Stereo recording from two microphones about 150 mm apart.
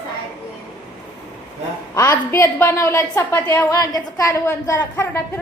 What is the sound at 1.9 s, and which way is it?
A woman's voice, 20° left (ahead or behind).